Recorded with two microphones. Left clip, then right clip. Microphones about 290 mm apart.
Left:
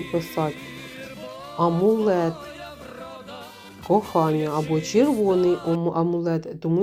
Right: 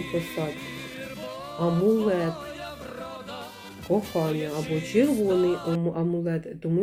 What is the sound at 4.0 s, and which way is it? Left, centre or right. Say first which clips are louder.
Speech: left 6 dB; centre.